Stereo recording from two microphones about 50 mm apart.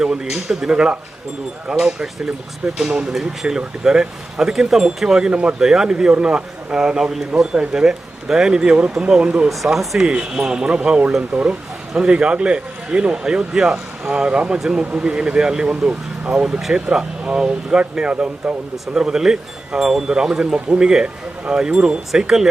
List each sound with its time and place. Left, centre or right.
0.0 s speech: centre
1.7 s speech: centre
2.6 s speech: centre
5.3 s speech: right
5.5 s speech: centre
7.0 s speech: centre
7.5 s speech: centre
9.6 s speech: centre
10.1 s speech: centre